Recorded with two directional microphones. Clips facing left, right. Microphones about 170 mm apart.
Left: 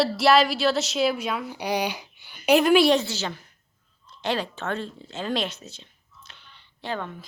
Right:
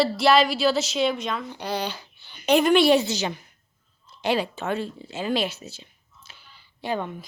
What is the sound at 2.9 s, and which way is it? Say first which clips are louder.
A woman's voice: right 3 dB; 15° right (ahead or behind).